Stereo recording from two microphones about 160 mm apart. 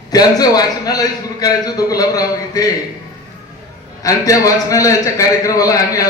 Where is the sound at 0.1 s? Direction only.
25° left (ahead or behind).